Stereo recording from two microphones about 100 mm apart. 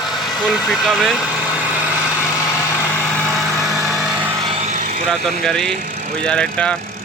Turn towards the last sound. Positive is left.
turn(degrees=10)  # may be behind; listen again after turning